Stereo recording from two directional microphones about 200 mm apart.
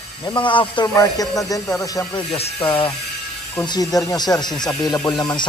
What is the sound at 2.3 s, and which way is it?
Speech, 30° left (ahead or behind).